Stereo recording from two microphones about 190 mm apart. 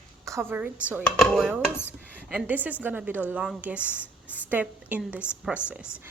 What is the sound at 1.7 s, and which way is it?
Dishes, 10° left (ahead or behind).